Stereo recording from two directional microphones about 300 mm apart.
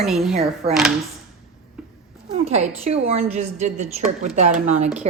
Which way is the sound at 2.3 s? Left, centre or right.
Right.